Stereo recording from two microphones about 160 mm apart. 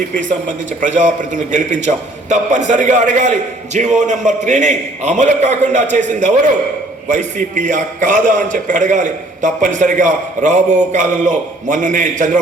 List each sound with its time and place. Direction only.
0.1 s a man's voice: 55° right (ahead or behind)